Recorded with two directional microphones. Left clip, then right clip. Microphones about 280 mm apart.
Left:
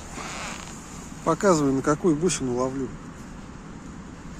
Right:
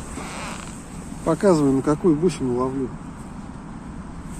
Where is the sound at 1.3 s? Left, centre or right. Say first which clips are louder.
Right 3 dB; centre.